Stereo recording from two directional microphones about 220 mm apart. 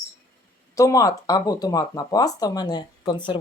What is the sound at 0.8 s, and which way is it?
Speech, 15° left (ahead or behind).